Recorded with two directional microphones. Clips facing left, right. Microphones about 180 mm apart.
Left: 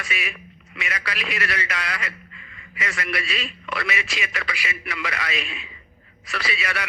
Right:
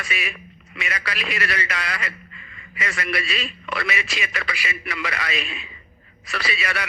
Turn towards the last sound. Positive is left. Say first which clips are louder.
# right 1 dB
turn(degrees=-35)  # may be behind; listen again after turning